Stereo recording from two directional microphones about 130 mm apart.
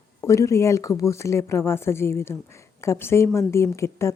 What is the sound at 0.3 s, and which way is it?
A woman's voice, 25° left (ahead or behind).